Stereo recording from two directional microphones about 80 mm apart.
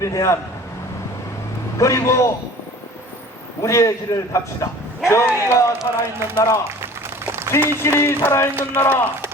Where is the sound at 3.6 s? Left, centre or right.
Left.